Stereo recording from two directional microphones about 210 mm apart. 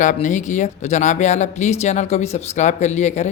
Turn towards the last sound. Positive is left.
turn(degrees=35)  # may be behind; listen again after turning